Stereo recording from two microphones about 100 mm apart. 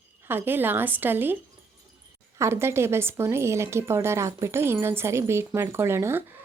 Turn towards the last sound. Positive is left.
turn(degrees=-25)  # may be behind; listen again after turning